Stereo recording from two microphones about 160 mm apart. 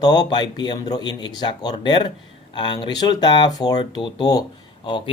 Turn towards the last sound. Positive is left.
turn(degrees=25)  # may be behind; listen again after turning